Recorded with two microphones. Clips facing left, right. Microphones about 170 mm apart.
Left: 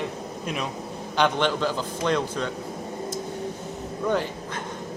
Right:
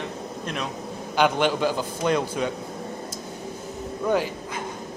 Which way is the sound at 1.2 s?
10° right (ahead or behind).